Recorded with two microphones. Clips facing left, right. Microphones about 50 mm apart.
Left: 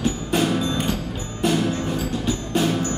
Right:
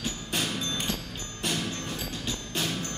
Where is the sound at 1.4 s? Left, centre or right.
Centre.